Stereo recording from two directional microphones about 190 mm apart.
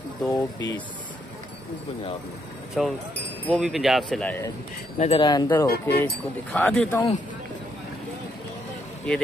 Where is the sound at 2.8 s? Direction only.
Centre (ahead or behind).